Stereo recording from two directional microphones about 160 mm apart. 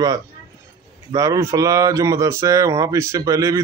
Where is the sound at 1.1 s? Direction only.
20° right (ahead or behind).